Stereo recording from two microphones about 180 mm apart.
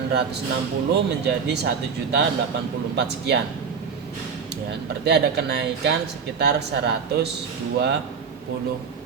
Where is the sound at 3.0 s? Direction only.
70° right (ahead or behind).